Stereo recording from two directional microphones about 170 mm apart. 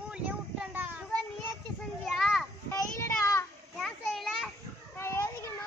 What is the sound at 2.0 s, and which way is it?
Children playing, centre (ahead or behind).